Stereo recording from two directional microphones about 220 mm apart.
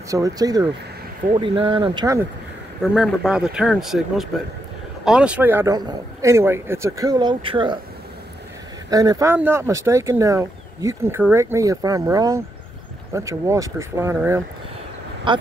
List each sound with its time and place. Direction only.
0.1 s speech: 15° right (ahead or behind)
2.8 s speech: centre (ahead or behind); by 7.8 s 20° right (ahead or behind)
8.9 s speech: 15° right (ahead or behind)
15.3 s speech: 20° right (ahead or behind)